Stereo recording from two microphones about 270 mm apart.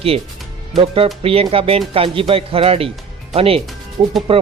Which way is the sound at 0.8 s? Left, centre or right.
Right.